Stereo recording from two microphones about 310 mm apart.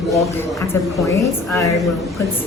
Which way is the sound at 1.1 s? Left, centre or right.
Centre.